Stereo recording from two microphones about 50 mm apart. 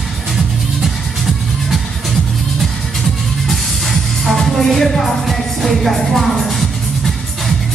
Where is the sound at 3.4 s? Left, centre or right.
Centre.